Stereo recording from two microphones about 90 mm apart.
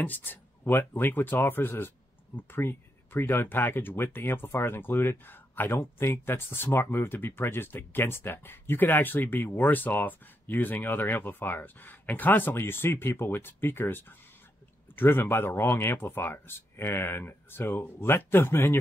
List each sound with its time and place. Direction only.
0.0 s speech: 20° left (ahead or behind)